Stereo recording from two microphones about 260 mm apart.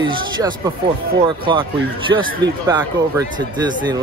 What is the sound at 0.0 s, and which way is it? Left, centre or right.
Speech, centre.